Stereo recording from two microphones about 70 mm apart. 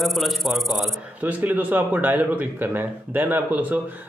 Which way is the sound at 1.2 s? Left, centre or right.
Right.